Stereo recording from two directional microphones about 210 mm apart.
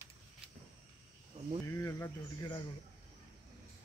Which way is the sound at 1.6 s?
15° left (ahead or behind).